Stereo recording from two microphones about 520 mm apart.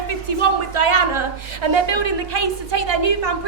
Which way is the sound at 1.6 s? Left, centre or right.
Right.